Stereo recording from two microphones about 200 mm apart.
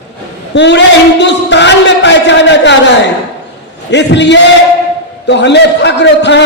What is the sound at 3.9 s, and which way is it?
A man's voice, 60° left (ahead or behind).